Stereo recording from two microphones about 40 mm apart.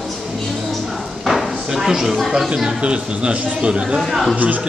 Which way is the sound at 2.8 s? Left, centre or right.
Right.